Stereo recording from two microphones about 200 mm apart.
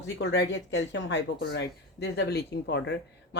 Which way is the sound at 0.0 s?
65° left (ahead or behind).